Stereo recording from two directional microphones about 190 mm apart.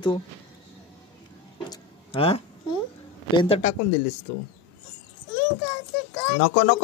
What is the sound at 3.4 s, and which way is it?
Speech, 30° left (ahead or behind).